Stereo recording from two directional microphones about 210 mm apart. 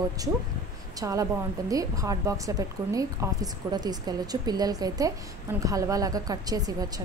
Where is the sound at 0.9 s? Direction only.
15° right (ahead or behind).